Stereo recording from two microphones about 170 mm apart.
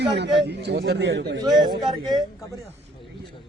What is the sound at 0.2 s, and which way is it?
A man's voice, 90° right.